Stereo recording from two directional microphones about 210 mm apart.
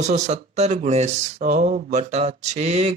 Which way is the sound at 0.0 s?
35° right (ahead or behind).